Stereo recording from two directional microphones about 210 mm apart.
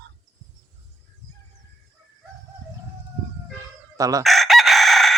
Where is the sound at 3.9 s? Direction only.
15° right (ahead or behind).